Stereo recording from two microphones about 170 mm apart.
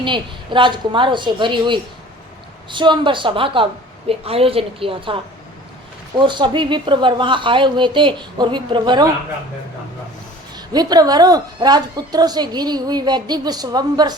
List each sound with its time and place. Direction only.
0.0 s a woman's voice: 30° right (ahead or behind)
10.7 s a woman's voice: 25° right (ahead or behind)